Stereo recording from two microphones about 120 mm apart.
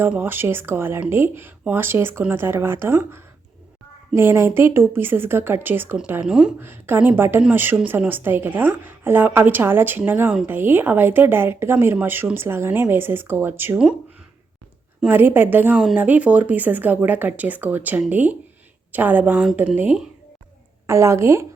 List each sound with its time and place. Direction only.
0.1 s speech: 15° right (ahead or behind)
6.6 s speech: 20° right (ahead or behind)
15.0 s speech: 15° right (ahead or behind)
20.8 s speech: 25° right (ahead or behind)